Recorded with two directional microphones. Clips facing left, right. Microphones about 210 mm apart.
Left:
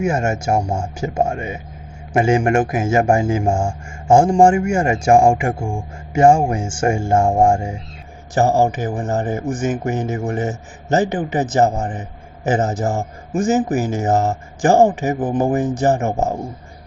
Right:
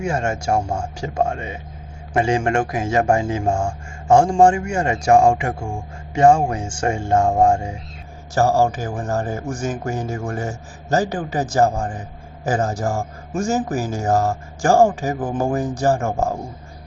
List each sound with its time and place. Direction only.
0.0 s speech: 20° left (ahead or behind)
8.4 s speech: 20° left (ahead or behind)